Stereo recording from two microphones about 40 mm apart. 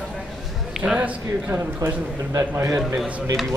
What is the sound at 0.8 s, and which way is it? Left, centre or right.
Speech, centre.